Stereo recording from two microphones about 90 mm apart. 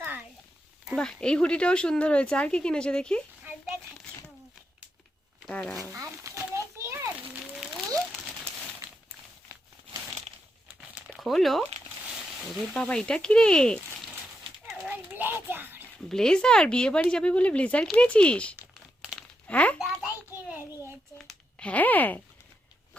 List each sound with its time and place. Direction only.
0.9 s speech: 10° left (ahead or behind)
5.5 s speech: 10° left (ahead or behind)
5.9 s a sound: 30° right (ahead or behind)
10.8 s crumpling: 20° right (ahead or behind)
11.2 s speech: centre (ahead or behind)
14.8 s child singing: 20° right (ahead or behind)
16.0 s speech: 5° left (ahead or behind)
20.1 s a sound: 15° right (ahead or behind)
21.6 s speech: 15° left (ahead or behind)